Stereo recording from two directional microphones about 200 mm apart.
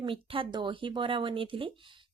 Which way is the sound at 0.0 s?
25° right (ahead or behind).